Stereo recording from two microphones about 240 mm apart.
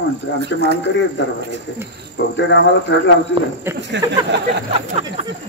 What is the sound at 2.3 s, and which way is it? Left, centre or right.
Speech, left.